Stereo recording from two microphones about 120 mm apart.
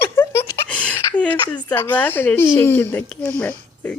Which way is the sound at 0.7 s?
10° left (ahead or behind).